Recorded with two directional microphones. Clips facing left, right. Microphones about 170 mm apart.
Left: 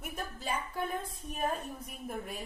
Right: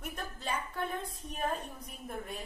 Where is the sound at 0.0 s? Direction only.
10° left (ahead or behind).